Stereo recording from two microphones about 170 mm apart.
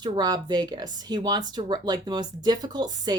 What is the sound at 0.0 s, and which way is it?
Speech, 25° right (ahead or behind).